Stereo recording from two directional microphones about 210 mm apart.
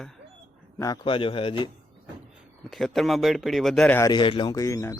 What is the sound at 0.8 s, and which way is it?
Speech, 20° left (ahead or behind).